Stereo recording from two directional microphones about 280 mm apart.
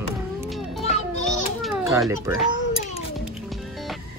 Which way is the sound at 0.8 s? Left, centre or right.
Left.